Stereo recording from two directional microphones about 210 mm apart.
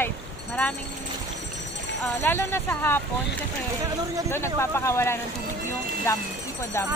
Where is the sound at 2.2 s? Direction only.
10° left (ahead or behind).